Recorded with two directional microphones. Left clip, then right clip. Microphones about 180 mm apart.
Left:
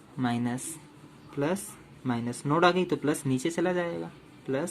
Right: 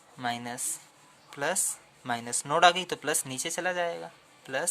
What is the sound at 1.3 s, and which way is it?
Speech, 55° right (ahead or behind).